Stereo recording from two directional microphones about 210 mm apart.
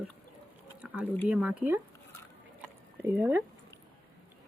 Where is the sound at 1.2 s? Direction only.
5° right (ahead or behind).